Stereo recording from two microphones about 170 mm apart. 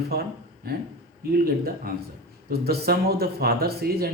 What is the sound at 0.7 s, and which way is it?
Speech, 65° right (ahead or behind).